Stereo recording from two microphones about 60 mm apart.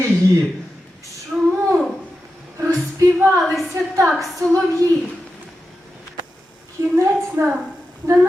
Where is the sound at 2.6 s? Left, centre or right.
Right.